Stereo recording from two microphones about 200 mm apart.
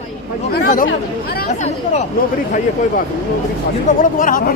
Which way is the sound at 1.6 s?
35° left (ahead or behind).